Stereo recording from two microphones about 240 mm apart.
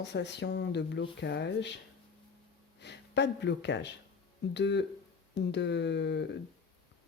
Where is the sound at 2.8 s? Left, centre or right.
Left.